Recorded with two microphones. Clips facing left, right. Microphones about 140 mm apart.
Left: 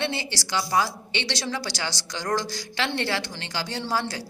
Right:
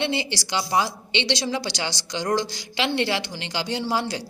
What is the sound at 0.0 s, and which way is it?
A woman's voice, 20° right (ahead or behind).